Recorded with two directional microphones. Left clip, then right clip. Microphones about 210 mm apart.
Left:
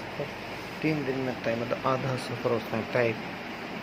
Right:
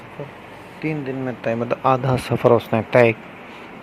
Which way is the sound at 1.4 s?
45° right (ahead or behind).